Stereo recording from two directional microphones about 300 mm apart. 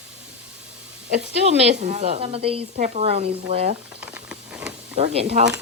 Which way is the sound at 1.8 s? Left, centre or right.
Right.